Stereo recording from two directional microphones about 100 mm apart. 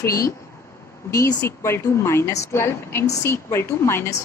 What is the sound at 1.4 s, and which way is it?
A woman's voice, 25° left (ahead or behind).